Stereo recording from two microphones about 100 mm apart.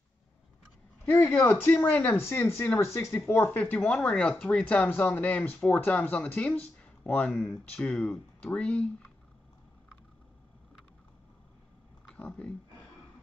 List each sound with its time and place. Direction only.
1.1 s speech: 25° left (ahead or behind)
6.8 s a sound: 15° left (ahead or behind)
7.9 s speech: centre (ahead or behind)
12.1 s speech: 10° left (ahead or behind)